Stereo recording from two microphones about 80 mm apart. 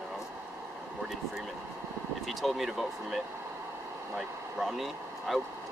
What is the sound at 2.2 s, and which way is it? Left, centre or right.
Speech, centre.